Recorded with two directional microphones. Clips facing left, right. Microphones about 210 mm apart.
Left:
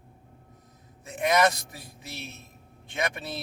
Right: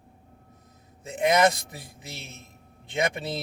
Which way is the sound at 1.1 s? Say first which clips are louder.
Right 2 dB; 20° right (ahead or behind).